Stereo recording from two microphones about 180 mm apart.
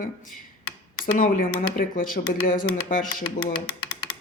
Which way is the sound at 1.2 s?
50° left (ahead or behind).